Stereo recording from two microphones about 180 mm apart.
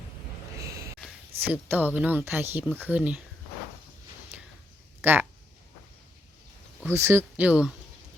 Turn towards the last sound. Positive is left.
turn(degrees=-5)  # may be behind; listen again after turning